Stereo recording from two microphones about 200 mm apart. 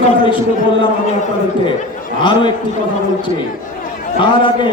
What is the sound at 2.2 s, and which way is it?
Speech, 25° left (ahead or behind).